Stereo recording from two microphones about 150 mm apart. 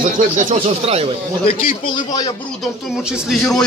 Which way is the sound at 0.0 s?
55° right (ahead or behind).